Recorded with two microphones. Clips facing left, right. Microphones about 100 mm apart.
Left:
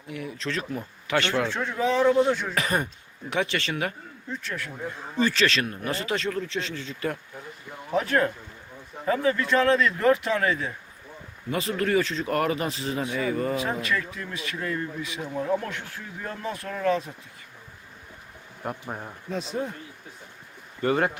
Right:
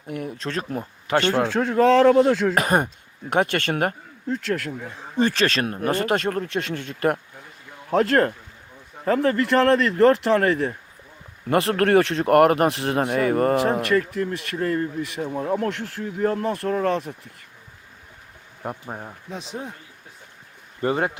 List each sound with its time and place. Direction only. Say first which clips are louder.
0.1 s speech: right 3 dB; 45° right (ahead or behind)
1.7 s speech: right 7 dB; 90° right
2.6 s speech: right 6 dB; 45° right (ahead or behind)
4.3 s speech: right 9 dB; 85° right
5.2 s speech: right 3 dB; 50° right (ahead or behind)
15.7 s speech: right 6 dB; 70° right (ahead or behind)
16.0 s speech: right 11 dB; 55° right (ahead or behind)
16.6 s speech: right 4 dB; 45° right (ahead or behind)
18.6 s speech: right 1 dB; 15° right (ahead or behind)
20.8 s speech: right 1 dB; 25° right (ahead or behind)